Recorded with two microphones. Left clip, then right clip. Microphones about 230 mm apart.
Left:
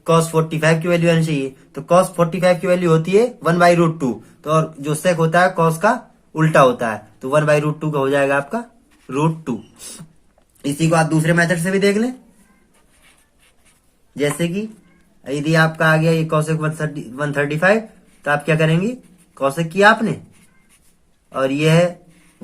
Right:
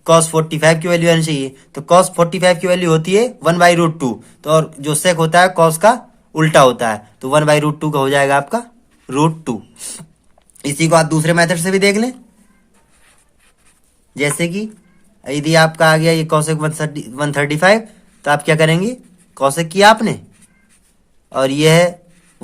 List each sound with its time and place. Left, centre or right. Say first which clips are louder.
0.0 s speech: right 4 dB; right
14.2 s speech: right 3 dB; right
21.2 s speech: right 5 dB; right